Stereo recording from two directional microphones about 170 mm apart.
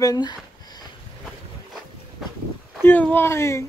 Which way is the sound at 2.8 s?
10° left (ahead or behind).